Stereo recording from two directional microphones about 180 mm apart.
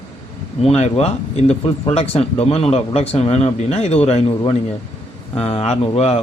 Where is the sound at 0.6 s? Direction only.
35° left (ahead or behind).